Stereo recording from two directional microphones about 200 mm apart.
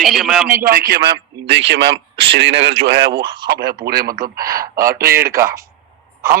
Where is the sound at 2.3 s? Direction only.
60° right (ahead or behind).